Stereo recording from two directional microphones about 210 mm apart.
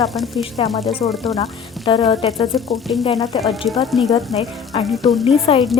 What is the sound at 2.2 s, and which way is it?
Speech, centre (ahead or behind).